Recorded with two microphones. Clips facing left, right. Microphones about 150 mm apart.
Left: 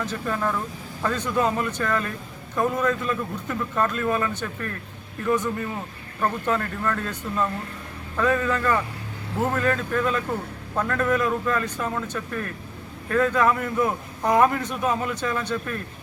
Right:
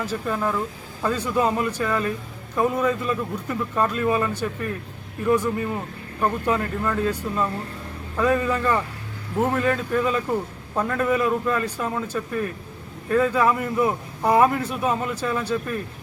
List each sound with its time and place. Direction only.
0.0 s a man's voice: 5° right (ahead or behind)